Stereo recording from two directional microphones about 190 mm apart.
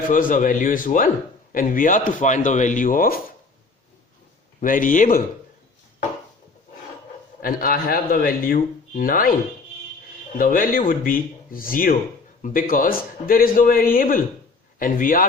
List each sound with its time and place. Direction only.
0.1 s speech: 45° left (ahead or behind)
4.6 s speech: 45° left (ahead or behind)
7.4 s speech: 50° left (ahead or behind)
10.3 s speech: 45° left (ahead or behind)